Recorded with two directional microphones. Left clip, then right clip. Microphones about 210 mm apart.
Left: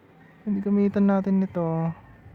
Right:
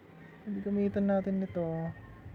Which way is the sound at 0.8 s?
30° left (ahead or behind).